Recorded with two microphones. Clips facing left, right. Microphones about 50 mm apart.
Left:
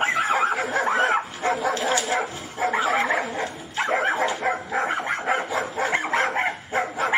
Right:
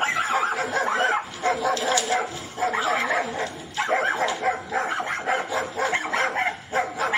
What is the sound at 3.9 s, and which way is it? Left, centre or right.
Dog, centre.